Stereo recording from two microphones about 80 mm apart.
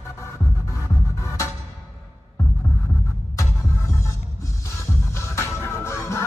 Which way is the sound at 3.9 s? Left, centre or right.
Left.